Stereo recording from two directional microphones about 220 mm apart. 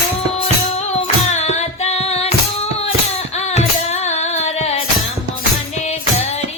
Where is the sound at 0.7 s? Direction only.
30° left (ahead or behind).